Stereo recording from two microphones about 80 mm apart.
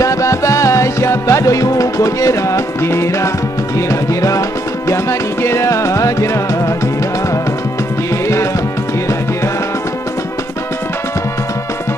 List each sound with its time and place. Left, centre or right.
0.0 s music: left